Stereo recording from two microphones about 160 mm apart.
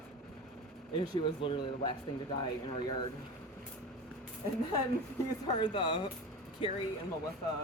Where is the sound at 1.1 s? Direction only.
35° left (ahead or behind).